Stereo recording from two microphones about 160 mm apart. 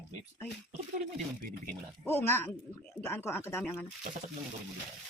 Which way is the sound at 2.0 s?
15° left (ahead or behind).